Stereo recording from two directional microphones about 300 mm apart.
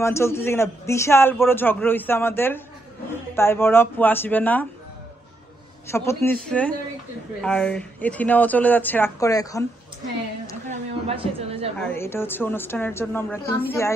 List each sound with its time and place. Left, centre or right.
0.0 s a man's voice: centre
5.9 s a man's voice: centre
10.7 s speech: centre
11.8 s a man's voice: centre